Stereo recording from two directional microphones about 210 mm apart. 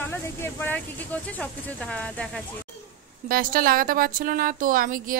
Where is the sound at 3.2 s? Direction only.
45° right (ahead or behind).